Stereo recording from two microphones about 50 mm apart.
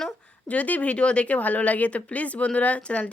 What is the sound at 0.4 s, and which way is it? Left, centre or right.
Speech, left.